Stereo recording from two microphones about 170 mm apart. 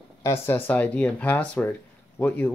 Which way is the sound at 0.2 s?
15° left (ahead or behind).